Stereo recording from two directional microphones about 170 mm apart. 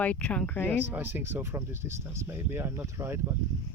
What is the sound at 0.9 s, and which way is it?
Speech, 10° right (ahead or behind).